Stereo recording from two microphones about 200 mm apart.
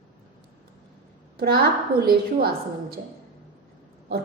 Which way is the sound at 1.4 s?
50° right (ahead or behind).